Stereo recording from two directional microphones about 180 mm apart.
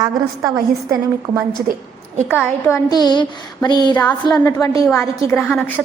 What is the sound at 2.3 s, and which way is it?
Speech, 10° left (ahead or behind).